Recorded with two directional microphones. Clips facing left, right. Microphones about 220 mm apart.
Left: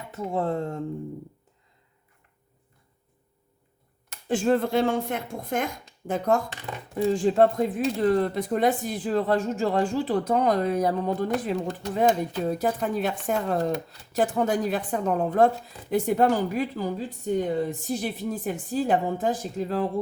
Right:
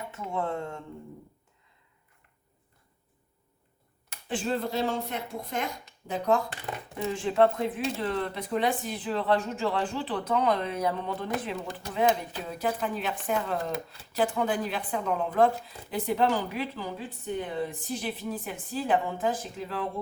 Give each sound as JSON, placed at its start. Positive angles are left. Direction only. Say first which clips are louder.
{"t": 0.1, "sound": "speech", "louder": "left 6 dB", "side_deg": 35}
{"t": 4.3, "sound": "speech", "louder": "left 7 dB", "side_deg": 50}